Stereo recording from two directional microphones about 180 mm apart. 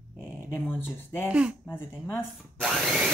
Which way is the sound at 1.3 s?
5° right (ahead or behind).